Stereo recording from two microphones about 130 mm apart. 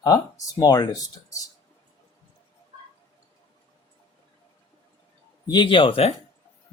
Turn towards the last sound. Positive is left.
turn(degrees=40)  # may be behind; listen again after turning